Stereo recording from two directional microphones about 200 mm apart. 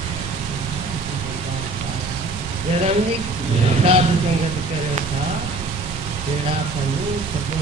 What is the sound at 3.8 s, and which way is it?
Speech, 30° right (ahead or behind).